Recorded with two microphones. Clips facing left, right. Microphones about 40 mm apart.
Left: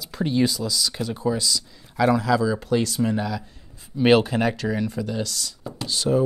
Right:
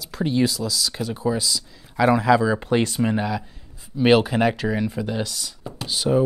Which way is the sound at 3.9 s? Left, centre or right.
Centre.